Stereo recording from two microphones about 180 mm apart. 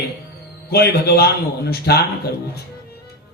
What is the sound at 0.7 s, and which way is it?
Speech, 60° left (ahead or behind).